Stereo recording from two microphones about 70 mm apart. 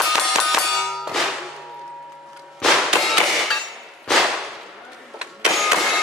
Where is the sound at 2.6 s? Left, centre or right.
Centre.